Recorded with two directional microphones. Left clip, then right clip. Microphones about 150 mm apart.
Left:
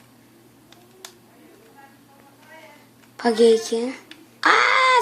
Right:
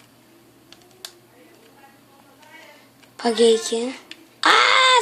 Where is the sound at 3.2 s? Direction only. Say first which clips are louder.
Left 1 dB; 5° right (ahead or behind).